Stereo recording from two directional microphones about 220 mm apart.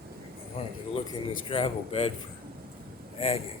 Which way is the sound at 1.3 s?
25° left (ahead or behind).